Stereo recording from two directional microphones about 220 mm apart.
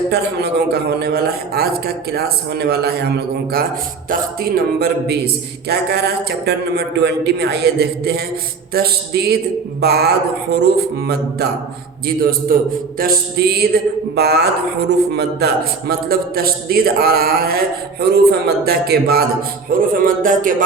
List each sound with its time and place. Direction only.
0.1 s speech: 45° right (ahead or behind)